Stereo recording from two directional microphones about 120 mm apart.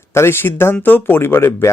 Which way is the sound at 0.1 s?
20° left (ahead or behind).